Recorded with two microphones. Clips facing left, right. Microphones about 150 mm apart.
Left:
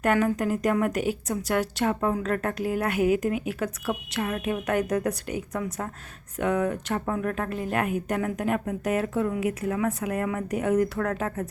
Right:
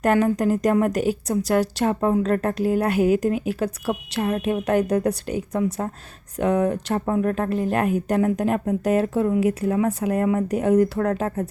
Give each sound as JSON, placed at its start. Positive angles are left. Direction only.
{"t": 0.0, "sound": "a woman's voice", "side_deg": -35}